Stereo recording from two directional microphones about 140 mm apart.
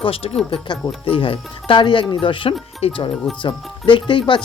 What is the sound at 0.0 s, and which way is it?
Speech, 40° left (ahead or behind).